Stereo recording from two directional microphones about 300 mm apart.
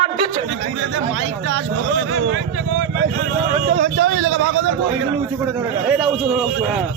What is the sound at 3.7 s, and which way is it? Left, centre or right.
A man's voice, right.